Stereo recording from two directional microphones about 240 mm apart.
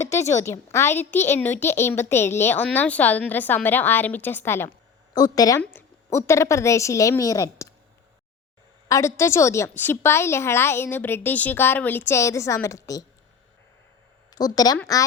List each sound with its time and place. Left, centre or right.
0.1 s a woman's voice: centre
8.9 s a woman's voice: centre
14.3 s a woman's voice: centre